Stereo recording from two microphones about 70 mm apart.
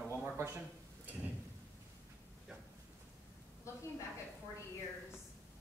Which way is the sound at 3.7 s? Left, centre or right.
Left.